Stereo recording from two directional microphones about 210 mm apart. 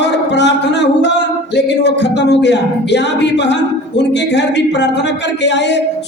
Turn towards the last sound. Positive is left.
turn(degrees=55)  # may be behind; listen again after turning